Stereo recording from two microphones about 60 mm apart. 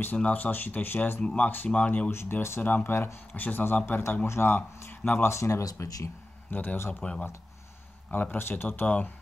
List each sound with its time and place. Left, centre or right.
0.2 s speech: left
1.2 s speech: centre
2.0 s speech: left
2.6 s speech: left
2.9 s speech: left
3.3 s speech: left
5.3 s speech: left
6.5 s speech: left
6.9 s speech: centre
8.1 s speech: left
8.6 s speech: left